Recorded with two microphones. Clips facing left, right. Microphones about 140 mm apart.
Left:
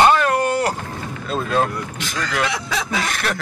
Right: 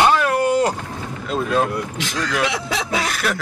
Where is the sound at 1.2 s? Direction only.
10° right (ahead or behind).